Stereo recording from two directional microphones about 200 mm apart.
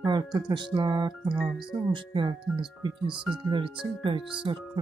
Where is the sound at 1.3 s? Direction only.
5° right (ahead or behind).